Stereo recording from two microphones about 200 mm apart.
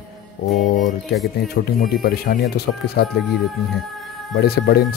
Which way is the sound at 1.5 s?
50° left (ahead or behind).